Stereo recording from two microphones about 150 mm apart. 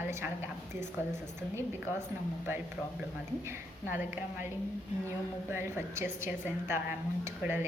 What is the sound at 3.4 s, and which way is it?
A woman's voice, 15° right (ahead or behind).